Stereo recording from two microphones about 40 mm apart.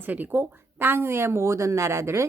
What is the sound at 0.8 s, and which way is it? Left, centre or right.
Speech, right.